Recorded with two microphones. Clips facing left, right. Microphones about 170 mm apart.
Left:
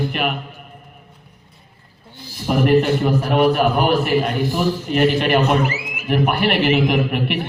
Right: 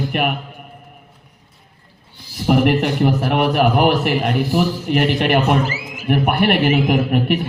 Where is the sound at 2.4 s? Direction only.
70° right (ahead or behind).